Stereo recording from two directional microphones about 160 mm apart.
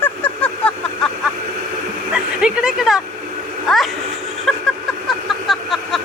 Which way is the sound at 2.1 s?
5° right (ahead or behind).